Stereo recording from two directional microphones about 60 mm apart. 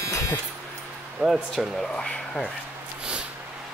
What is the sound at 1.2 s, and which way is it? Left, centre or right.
Speech, centre.